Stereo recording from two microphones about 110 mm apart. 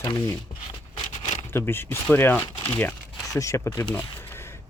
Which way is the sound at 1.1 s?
75° left (ahead or behind).